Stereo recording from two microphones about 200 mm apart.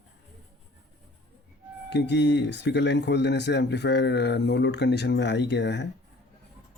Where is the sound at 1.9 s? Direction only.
60° left (ahead or behind).